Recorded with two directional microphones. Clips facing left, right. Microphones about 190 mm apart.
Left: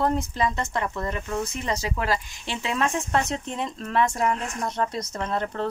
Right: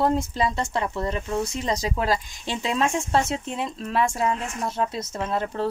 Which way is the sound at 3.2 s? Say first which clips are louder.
Right 1 dB; 5° right (ahead or behind).